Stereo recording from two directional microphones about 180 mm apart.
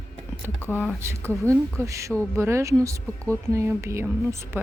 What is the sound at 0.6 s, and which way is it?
Speech, 10° left (ahead or behind).